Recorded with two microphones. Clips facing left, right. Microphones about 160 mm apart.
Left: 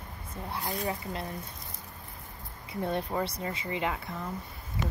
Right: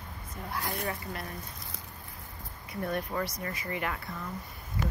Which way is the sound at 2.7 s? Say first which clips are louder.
Left 2 dB; 25° left (ahead or behind).